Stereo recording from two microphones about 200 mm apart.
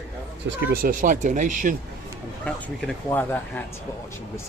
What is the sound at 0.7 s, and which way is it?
Speech, 45° right (ahead or behind).